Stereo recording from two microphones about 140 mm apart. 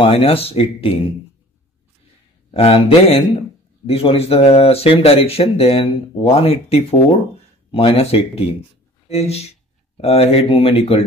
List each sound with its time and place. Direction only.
0.0 s a man's voice: 40° left (ahead or behind)
2.5 s a man's voice: 45° left (ahead or behind)